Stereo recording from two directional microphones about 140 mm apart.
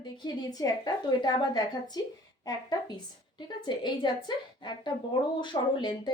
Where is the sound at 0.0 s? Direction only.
30° left (ahead or behind).